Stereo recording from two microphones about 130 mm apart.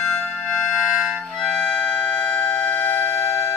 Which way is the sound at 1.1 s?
5° left (ahead or behind).